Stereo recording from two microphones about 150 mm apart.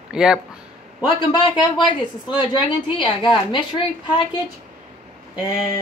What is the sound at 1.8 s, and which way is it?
A woman's voice, 30° left (ahead or behind).